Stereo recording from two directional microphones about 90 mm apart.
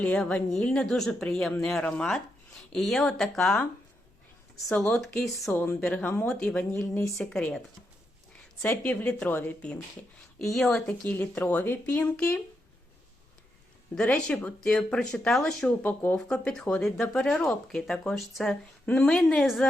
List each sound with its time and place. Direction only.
0.0 s speech: 10° left (ahead or behind)
4.9 s speech: centre (ahead or behind)
5.5 s speech: 25° left (ahead or behind)
5.8 s speech: 10° left (ahead or behind)
8.7 s speech: 20° left (ahead or behind)
10.4 s speech: centre (ahead or behind)
10.8 s speech: 20° left (ahead or behind)
13.9 s speech: 10° left (ahead or behind)
15.8 s speech: 20° left (ahead or behind)
16.3 s speech: 10° left (ahead or behind)